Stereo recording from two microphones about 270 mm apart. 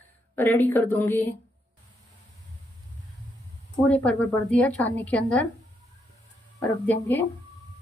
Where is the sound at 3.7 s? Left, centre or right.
Centre.